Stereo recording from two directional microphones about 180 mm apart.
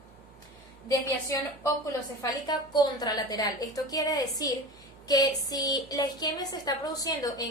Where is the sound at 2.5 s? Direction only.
25° left (ahead or behind).